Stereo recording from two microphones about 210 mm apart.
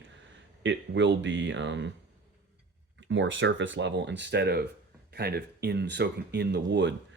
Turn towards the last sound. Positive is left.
turn(degrees=-55)  # may be behind; listen again after turning